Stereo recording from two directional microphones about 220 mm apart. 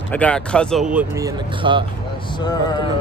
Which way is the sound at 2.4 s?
20° left (ahead or behind).